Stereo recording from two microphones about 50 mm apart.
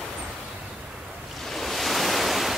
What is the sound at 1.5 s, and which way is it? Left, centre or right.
Waves, centre.